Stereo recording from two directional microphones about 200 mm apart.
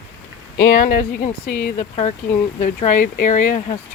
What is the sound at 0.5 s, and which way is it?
Speech, 50° left (ahead or behind).